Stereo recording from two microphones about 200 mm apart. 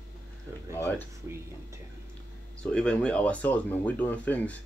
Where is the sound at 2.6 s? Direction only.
5° left (ahead or behind).